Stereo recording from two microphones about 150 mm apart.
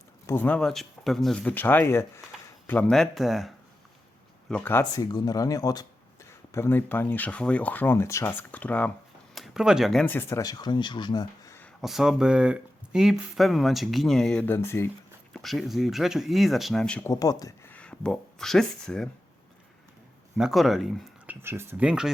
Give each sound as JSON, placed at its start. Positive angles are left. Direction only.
{"t": 0.3, "sound": "speech", "side_deg": 10}
{"t": 4.9, "sound": "speech", "side_deg": 25}
{"t": 9.3, "sound": "speech", "side_deg": 0}
{"t": 11.8, "sound": "speech", "side_deg": 0}
{"t": 15.3, "sound": "speech", "side_deg": 0}
{"t": 17.1, "sound": "speech", "side_deg": 25}
{"t": 17.7, "sound": "speech", "side_deg": 10}
{"t": 20.3, "sound": "speech", "side_deg": 0}
{"t": 21.4, "sound": "speech", "side_deg": -15}